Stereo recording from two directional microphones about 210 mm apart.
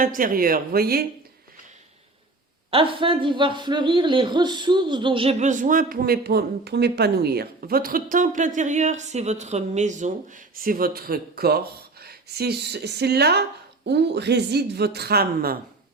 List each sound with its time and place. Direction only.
0.0 s speech: 40° right (ahead or behind)
2.6 s speech: 25° right (ahead or behind); by 15.5 s 45° right (ahead or behind)